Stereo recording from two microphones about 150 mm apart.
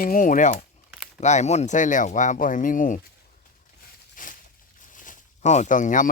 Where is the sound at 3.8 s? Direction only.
65° left (ahead or behind).